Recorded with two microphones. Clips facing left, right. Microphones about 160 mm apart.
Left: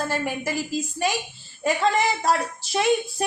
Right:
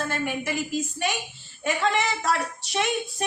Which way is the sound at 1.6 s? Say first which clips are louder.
Left 3 dB; 35° left (ahead or behind).